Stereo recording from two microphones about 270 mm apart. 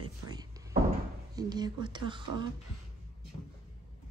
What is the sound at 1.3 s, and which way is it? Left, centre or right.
Speech, centre.